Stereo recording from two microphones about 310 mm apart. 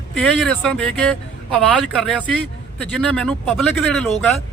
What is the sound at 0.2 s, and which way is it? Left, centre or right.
Speech, centre.